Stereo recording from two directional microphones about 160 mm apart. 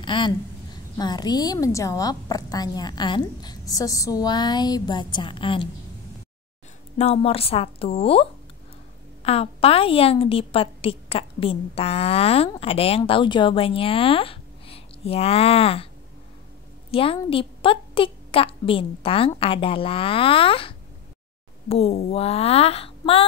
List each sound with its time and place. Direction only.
0.0 s a woman's voice: 30° left (ahead or behind)
7.0 s a woman's voice: 40° left (ahead or behind)
16.9 s a woman's voice: 35° left (ahead or behind)